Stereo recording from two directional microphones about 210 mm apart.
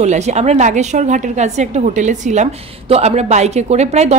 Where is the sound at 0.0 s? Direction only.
30° right (ahead or behind).